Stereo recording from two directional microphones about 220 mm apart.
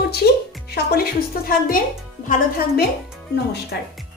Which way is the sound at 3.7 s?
50° left (ahead or behind).